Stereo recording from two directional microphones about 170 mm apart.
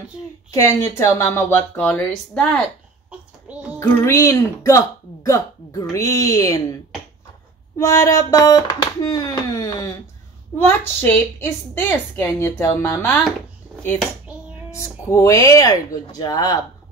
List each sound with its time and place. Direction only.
0.5 s a woman's voice: 20° left (ahead or behind)
3.5 s a sound: 10° right (ahead or behind)
3.8 s a woman's voice: 15° left (ahead or behind)
14.7 s speech: 15° left (ahead or behind)